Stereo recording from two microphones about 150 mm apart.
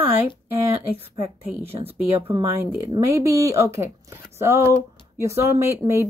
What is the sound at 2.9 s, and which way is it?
A woman's voice, 20° right (ahead or behind).